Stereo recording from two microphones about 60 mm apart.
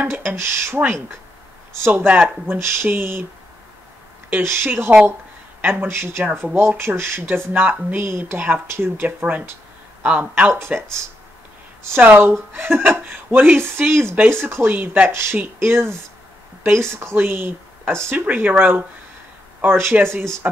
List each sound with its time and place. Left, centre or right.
0.4 s speech: right
1.9 s speech: right
2.6 s speech: right
4.3 s speech: right
5.6 s speech: right
5.9 s speech: right
10.5 s speech: right
12.0 s speech: right